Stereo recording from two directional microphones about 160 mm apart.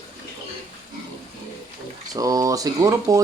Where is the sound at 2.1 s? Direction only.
20° right (ahead or behind).